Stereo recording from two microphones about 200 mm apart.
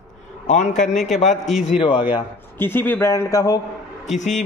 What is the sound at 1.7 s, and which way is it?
Speech, 25° left (ahead or behind).